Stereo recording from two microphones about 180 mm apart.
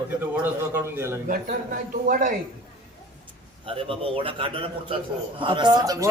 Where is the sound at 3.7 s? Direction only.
30° right (ahead or behind).